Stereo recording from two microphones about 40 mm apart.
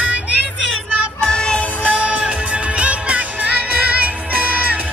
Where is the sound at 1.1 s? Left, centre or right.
Left.